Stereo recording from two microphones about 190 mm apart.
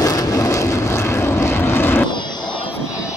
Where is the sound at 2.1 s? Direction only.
25° left (ahead or behind).